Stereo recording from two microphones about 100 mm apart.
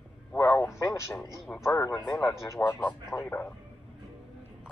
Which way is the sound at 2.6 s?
15° left (ahead or behind).